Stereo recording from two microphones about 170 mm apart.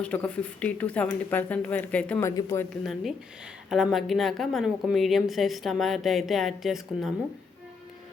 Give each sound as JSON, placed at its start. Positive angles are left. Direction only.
{"t": 0.0, "sound": "speech", "side_deg": 10}
{"t": 2.8, "sound": "a woman's voice", "side_deg": 0}